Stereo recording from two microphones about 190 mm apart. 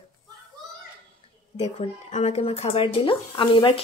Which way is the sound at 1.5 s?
35° left (ahead or behind).